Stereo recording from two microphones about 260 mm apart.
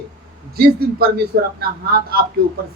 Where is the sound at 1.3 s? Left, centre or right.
Right.